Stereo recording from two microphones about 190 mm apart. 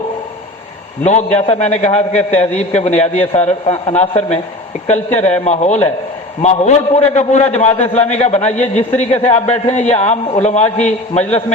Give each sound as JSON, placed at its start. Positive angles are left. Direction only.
{"t": 1.5, "sound": "a man's voice", "side_deg": 35}